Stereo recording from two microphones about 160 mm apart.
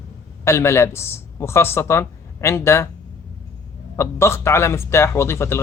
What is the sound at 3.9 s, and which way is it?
A man's voice, 15° left (ahead or behind).